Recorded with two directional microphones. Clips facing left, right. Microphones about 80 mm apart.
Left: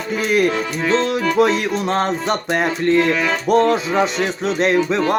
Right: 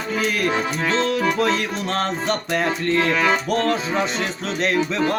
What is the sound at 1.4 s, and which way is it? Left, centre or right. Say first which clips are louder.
Speech: left 5 dB; centre.